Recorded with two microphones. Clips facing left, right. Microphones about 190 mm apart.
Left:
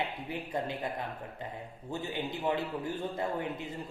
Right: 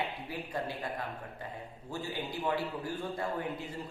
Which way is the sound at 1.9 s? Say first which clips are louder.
Left 2 dB; 20° left (ahead or behind).